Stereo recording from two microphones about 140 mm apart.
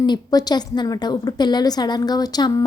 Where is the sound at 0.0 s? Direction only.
30° left (ahead or behind).